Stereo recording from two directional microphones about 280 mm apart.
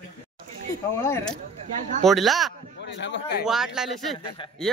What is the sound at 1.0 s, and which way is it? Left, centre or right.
A man's voice, centre.